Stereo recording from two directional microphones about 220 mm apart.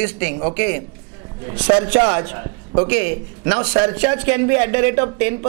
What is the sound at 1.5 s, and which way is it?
Speech, 10° right (ahead or behind).